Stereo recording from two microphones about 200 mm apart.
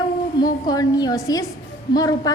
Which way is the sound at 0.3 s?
20° left (ahead or behind).